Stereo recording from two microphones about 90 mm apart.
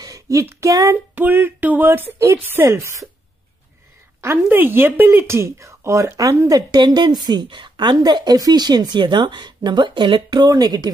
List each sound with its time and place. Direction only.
0.0 s speech: 40° right (ahead or behind)
1.1 s speech: 20° right (ahead or behind)
4.2 s speech: 25° right (ahead or behind); by 6.6 s 40° right (ahead or behind)
6.7 s a woman's voice: 55° right (ahead or behind)